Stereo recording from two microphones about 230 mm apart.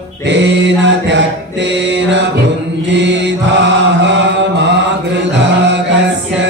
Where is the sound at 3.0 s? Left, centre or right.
Right.